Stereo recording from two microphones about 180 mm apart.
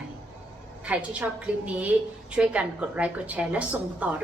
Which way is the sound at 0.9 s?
10° right (ahead or behind).